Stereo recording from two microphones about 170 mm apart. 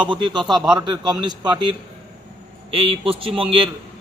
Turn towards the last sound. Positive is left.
turn(degrees=-30)  # may be behind; listen again after turning